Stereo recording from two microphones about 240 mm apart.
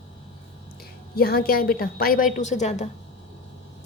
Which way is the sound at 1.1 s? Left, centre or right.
Left.